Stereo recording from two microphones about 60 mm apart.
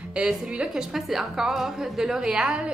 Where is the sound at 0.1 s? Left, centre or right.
Centre.